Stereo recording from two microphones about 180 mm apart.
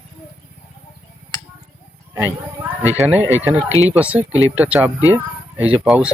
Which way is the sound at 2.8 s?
10° right (ahead or behind).